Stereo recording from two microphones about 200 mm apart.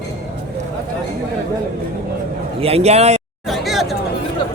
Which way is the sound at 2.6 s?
30° right (ahead or behind).